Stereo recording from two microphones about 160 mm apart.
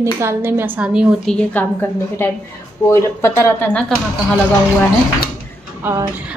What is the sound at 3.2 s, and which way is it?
Speech, 15° left (ahead or behind).